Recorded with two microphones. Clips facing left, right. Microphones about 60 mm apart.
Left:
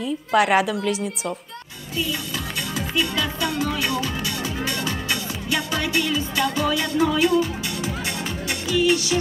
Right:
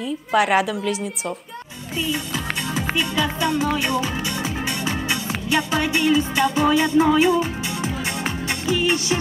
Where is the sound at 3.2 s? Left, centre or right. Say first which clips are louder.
Right 3 dB; right.